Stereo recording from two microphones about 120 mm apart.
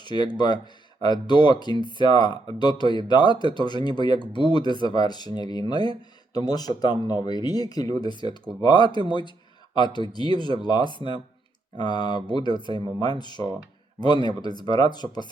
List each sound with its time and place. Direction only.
0.0 s speech: 35° left (ahead or behind)